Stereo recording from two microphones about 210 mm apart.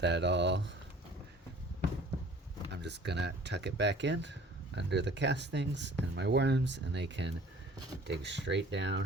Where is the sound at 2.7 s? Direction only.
55° right (ahead or behind).